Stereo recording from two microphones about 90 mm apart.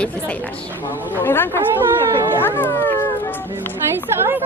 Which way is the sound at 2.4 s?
25° left (ahead or behind).